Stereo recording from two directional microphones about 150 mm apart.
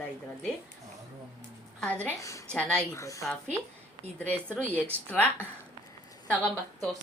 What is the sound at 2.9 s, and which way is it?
Speech, 20° left (ahead or behind).